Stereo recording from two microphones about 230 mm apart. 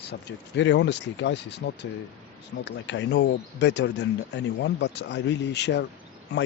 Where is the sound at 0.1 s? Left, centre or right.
Left.